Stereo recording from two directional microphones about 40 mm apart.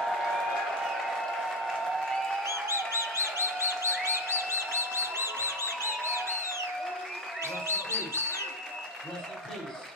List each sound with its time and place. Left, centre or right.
2.7 s music: right
7.4 s speech: right